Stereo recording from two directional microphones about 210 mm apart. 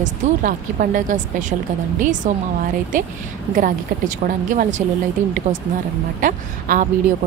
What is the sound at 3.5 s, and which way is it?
Speech, 40° right (ahead or behind).